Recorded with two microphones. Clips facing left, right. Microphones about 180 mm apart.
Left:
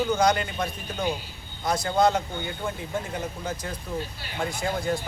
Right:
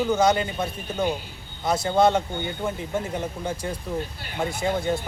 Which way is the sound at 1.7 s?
25° right (ahead or behind).